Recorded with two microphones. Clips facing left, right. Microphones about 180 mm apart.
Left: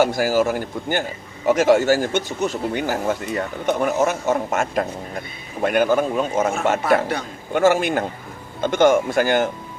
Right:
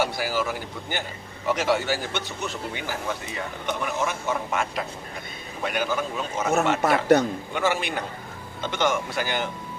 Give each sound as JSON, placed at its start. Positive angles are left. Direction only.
{"t": 0.0, "sound": "speech", "side_deg": 45}
{"t": 7.5, "sound": "speech", "side_deg": 45}